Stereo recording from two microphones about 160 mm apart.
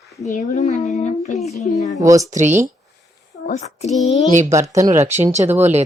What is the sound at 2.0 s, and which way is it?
Speech, 20° right (ahead or behind).